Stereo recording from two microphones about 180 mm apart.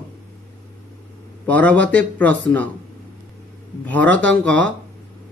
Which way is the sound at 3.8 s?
10° left (ahead or behind).